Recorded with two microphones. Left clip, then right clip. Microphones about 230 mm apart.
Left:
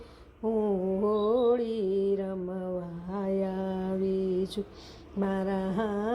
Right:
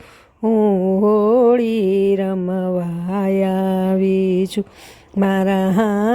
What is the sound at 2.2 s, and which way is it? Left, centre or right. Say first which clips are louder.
Mantra: right 13 dB; right.